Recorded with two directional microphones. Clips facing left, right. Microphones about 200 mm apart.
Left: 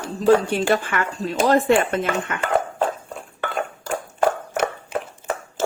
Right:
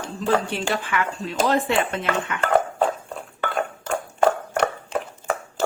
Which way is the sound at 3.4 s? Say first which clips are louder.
Right 1 dB; centre (ahead or behind).